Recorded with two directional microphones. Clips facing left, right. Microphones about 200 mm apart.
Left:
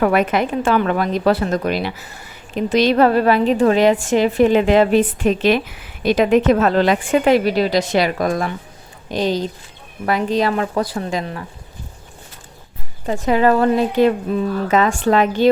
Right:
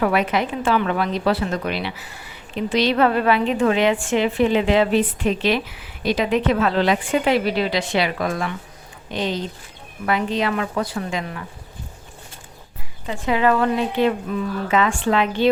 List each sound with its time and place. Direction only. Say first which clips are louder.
0.0 s a woman's voice: left 4 dB; 50° left (ahead or behind)
13.1 s a woman's voice: left 4 dB; 40° left (ahead or behind)